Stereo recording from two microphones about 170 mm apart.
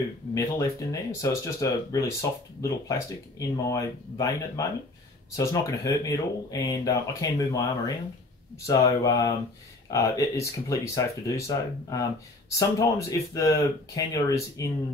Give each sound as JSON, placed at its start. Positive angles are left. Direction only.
{"t": 0.3, "sound": "speech", "side_deg": 20}